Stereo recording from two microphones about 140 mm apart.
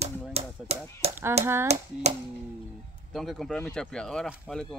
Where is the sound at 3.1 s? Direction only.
Centre (ahead or behind).